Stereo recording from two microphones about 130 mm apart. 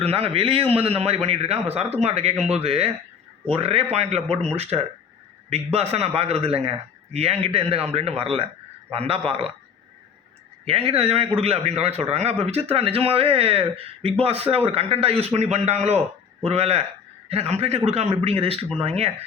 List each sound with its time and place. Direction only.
0.0 s a man's voice: 50° right (ahead or behind)
10.7 s a man's voice: 50° right (ahead or behind)